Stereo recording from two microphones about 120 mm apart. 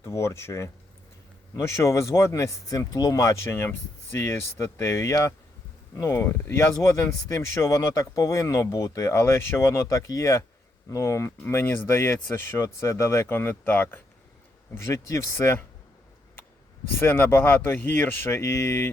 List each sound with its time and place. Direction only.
0.0 s speech: 25° left (ahead or behind)
14.8 s speech: 25° left (ahead or behind)
16.9 s speech: 20° left (ahead or behind)